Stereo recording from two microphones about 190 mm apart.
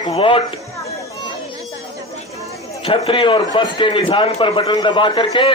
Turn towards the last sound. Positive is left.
turn(degrees=25)  # may be behind; listen again after turning